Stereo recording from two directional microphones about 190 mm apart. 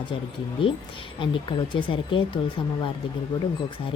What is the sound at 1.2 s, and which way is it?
Speech, 25° left (ahead or behind).